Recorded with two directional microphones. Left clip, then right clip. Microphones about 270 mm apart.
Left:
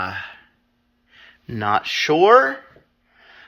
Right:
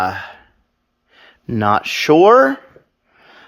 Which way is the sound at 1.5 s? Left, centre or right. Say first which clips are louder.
Right 4 dB; right.